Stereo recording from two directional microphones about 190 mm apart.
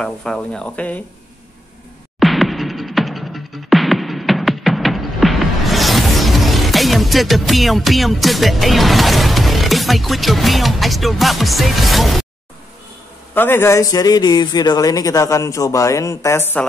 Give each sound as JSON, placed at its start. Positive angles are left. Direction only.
{"t": 0.0, "sound": "speech", "side_deg": 5}
{"t": 2.1, "sound": "music", "side_deg": 0}
{"t": 13.3, "sound": "a man's voice", "side_deg": 10}